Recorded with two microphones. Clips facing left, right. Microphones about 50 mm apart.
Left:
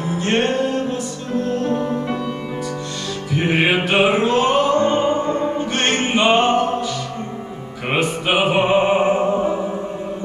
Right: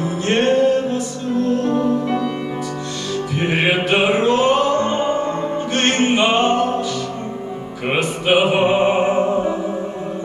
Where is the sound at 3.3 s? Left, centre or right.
Centre.